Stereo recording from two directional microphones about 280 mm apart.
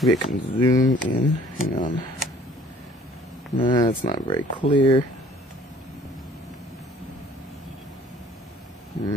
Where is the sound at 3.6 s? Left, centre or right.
Centre.